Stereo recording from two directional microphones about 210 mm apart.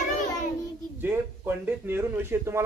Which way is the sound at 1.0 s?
10° right (ahead or behind).